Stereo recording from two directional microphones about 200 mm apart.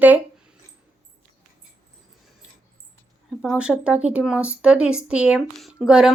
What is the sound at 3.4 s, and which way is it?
Child singing, 5° right (ahead or behind).